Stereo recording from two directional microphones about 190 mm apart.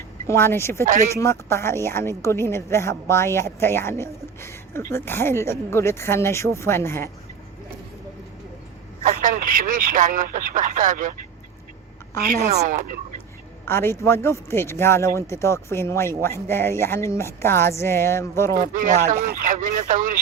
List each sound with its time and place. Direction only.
0.3 s a woman's voice: 15° left (ahead or behind)
0.9 s speech: 40° right (ahead or behind)
1.1 s a woman's voice: 15° left (ahead or behind)
9.0 s speech: 45° right (ahead or behind)
12.2 s speech: 40° right (ahead or behind)
13.7 s a woman's voice: 10° left (ahead or behind)
18.6 s speech: 40° right (ahead or behind)